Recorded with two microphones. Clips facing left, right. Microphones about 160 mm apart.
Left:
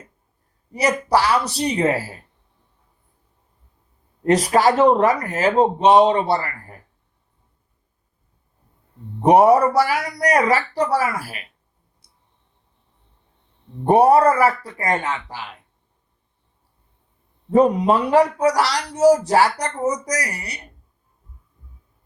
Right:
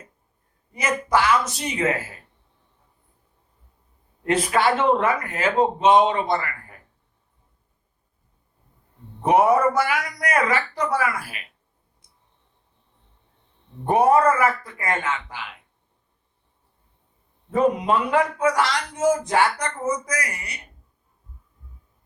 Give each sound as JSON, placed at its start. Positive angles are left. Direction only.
{"t": 0.7, "sound": "a man's voice", "side_deg": 35}
{"t": 4.2, "sound": "a man's voice", "side_deg": 40}
{"t": 9.2, "sound": "a man's voice", "side_deg": 35}
{"t": 13.8, "sound": "a man's voice", "side_deg": 35}
{"t": 17.5, "sound": "a man's voice", "side_deg": 35}